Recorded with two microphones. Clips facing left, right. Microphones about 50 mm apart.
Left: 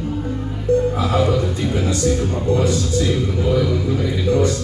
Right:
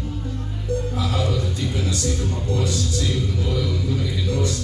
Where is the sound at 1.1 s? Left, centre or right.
Left.